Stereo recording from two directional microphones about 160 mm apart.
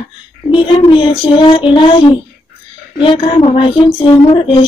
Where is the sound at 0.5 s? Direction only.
30° left (ahead or behind).